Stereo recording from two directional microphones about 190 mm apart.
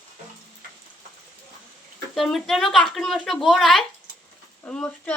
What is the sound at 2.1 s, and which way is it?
Speech, centre (ahead or behind).